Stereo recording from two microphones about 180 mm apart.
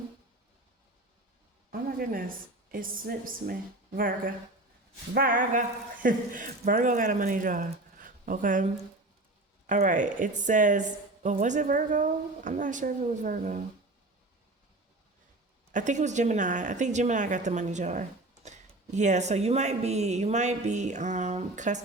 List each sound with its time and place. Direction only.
1.7 s a woman's voice: 55° right (ahead or behind)
5.1 s a woman's voice: 50° right (ahead or behind)
15.7 s speech: 45° right (ahead or behind)